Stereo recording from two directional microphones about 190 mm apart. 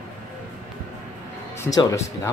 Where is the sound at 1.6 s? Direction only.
15° left (ahead or behind).